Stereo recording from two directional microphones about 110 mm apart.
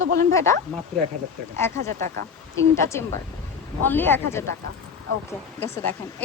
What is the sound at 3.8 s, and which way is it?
Speech, 20° left (ahead or behind).